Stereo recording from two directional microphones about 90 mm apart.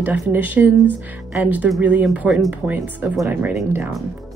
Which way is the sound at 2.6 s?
20° right (ahead or behind).